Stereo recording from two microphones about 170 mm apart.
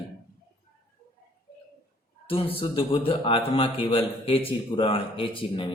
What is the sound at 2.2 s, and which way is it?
A man's voice, 35° left (ahead or behind).